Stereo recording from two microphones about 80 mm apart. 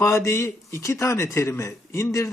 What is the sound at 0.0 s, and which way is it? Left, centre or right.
Speech, left.